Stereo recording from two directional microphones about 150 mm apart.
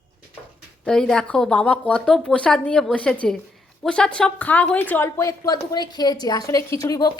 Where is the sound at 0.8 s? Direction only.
5° left (ahead or behind).